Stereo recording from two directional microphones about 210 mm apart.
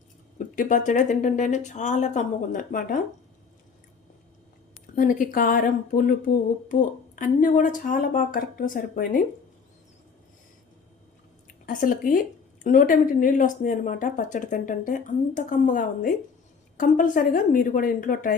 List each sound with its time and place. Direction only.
0.3 s speech: 40° left (ahead or behind)
4.9 s speech: 40° left (ahead or behind)
7.2 s speech: 40° left (ahead or behind)
11.4 s a woman's voice: 40° left (ahead or behind)